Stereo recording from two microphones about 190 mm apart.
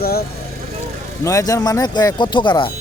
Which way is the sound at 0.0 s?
55° left (ahead or behind).